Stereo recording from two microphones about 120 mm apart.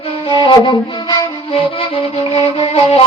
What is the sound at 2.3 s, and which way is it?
Music, 50° left (ahead or behind).